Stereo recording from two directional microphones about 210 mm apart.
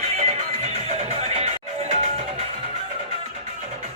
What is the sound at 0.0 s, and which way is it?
Music, 30° right (ahead or behind).